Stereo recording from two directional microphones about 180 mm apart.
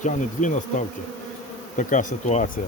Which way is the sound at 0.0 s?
45° left (ahead or behind).